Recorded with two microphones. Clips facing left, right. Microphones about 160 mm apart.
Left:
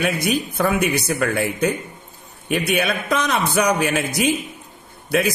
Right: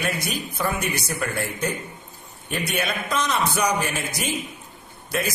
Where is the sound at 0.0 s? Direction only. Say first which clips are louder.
Left 7 dB; 60° left (ahead or behind).